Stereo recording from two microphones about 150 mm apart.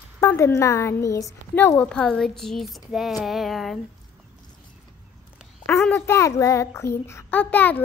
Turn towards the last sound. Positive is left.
turn(degrees=10)  # may be behind; listen again after turning